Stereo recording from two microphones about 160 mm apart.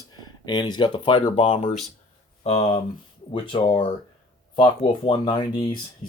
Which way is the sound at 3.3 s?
30° left (ahead or behind).